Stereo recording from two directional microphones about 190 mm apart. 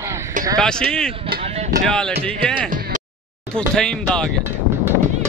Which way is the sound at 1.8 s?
5° left (ahead or behind).